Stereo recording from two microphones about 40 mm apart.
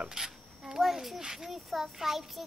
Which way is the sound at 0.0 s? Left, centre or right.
Centre.